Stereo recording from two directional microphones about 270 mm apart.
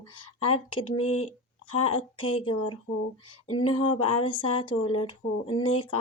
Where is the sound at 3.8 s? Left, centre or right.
Centre.